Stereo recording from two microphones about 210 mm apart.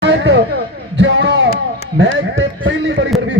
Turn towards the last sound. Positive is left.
turn(degrees=-65)  # may be behind; listen again after turning